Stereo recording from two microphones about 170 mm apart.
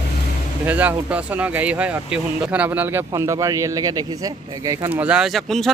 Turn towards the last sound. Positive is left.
turn(degrees=0)  # may be behind; listen again after turning